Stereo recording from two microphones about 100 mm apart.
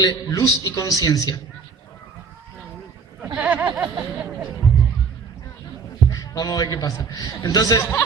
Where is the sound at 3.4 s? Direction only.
15° right (ahead or behind).